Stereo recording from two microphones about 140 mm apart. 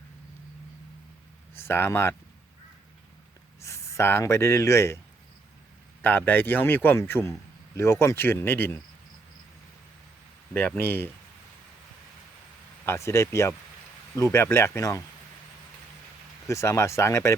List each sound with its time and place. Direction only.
1.5 s a man's voice: 15° left (ahead or behind)
3.6 s speech: 20° left (ahead or behind)
6.0 s a man's voice: 15° left (ahead or behind)
10.5 s a man's voice: 10° left (ahead or behind)
12.8 s speech: 20° left (ahead or behind)
16.5 s speech: 20° left (ahead or behind)